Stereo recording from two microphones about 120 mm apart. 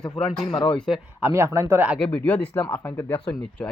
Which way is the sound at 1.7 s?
15° right (ahead or behind).